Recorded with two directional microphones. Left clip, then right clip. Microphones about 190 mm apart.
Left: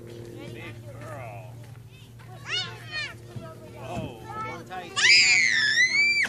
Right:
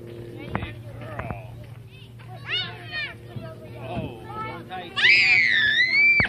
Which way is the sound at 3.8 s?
10° left (ahead or behind).